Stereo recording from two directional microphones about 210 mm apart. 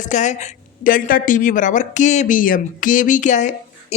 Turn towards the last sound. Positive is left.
turn(degrees=35)  # may be behind; listen again after turning